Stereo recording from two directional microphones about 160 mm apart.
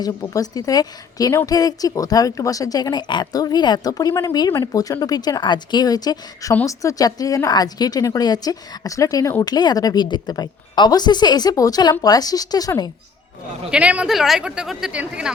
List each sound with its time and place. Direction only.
0.0 s speech: 20° left (ahead or behind)
13.7 s speech: 10° right (ahead or behind)